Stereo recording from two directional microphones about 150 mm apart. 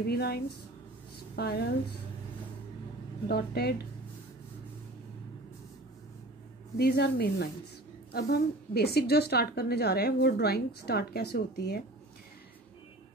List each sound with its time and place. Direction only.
0.0 s a woman's voice: 90° left
3.3 s a woman's voice: 90° left
6.8 s a woman's voice: 90° left